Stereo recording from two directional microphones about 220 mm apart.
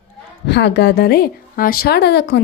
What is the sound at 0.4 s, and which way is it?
A woman's voice, 50° left (ahead or behind).